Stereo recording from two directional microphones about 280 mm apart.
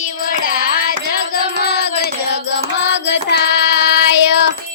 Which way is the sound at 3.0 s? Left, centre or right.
Left.